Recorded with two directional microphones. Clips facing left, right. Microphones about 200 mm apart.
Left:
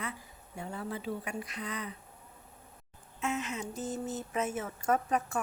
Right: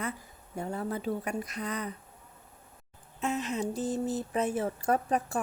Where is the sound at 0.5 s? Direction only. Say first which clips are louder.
Right 5 dB; 45° right (ahead or behind).